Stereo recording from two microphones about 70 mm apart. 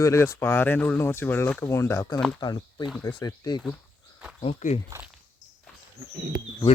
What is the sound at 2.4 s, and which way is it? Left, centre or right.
Speech, left.